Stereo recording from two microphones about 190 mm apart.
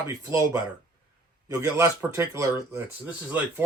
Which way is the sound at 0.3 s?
15° right (ahead or behind).